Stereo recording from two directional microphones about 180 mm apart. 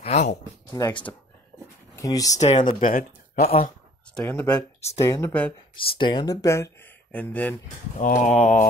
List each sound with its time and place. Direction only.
0.0 s speech: 40° left (ahead or behind)
0.7 s speech: 15° left (ahead or behind)
2.8 s speech: 50° left (ahead or behind)
4.1 s speech: 10° left (ahead or behind)
5.8 s speech: 25° left (ahead or behind); by 7.5 s 10° left (ahead or behind)
8.0 s speech: 45° left (ahead or behind)